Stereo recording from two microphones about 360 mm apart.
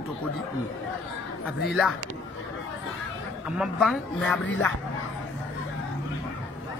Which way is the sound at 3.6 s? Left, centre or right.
Centre.